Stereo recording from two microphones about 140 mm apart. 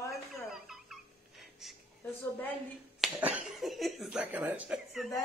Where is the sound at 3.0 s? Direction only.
5° right (ahead or behind).